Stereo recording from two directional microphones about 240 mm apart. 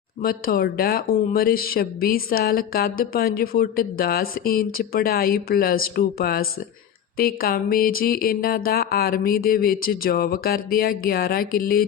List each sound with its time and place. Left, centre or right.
0.2 s speech: left